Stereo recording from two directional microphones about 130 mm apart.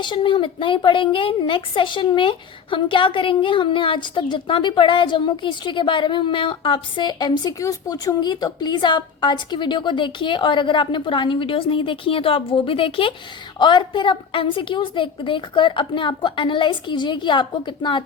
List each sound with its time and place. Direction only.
0.0 s a woman's voice: 40° left (ahead or behind)